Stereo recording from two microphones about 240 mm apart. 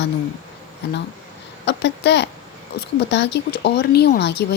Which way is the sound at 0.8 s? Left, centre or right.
Left.